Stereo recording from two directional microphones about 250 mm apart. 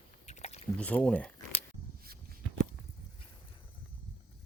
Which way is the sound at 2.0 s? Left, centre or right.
Right.